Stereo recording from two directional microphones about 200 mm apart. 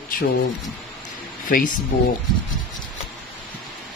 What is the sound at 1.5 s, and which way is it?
Speech, 45° left (ahead or behind).